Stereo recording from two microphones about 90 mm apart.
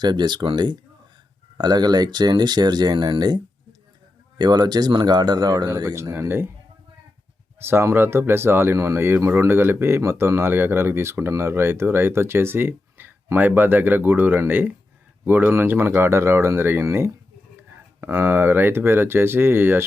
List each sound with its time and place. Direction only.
0.0 s speech: 55° right (ahead or behind)
5.9 s speech: 30° right (ahead or behind)
7.6 s speech: 25° right (ahead or behind)